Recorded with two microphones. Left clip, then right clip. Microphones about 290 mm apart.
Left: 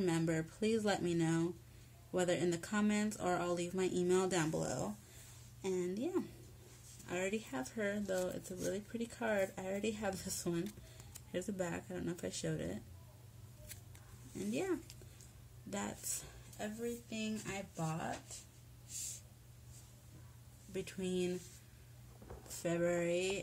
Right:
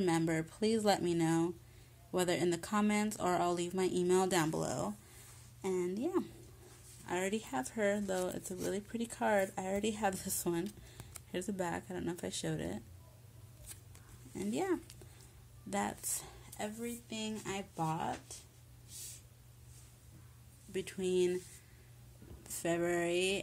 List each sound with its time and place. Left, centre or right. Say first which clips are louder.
0.0 s speech: right 3 dB; centre
14.3 s speech: right 3 dB; centre
20.7 s speech: right 6 dB; right
22.5 s speech: right 2 dB; right